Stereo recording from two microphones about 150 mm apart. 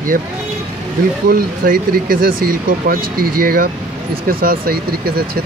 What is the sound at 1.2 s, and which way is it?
Speech, 70° right (ahead or behind).